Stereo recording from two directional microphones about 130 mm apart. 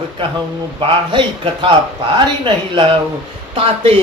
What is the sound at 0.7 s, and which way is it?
Speech, 40° right (ahead or behind).